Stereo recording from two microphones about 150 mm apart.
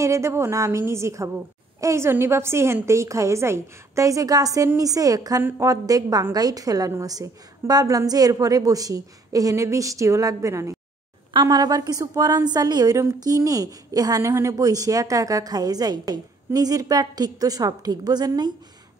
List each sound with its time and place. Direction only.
0.0 s a woman's voice: 20° right (ahead or behind)